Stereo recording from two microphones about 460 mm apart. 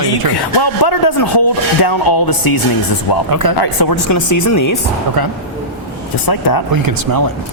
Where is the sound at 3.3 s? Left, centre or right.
Right.